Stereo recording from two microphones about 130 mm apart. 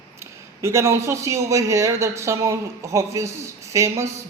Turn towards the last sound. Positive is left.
turn(degrees=-20)  # may be behind; listen again after turning